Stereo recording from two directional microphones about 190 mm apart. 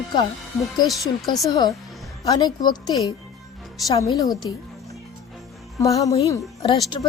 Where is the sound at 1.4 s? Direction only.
20° left (ahead or behind).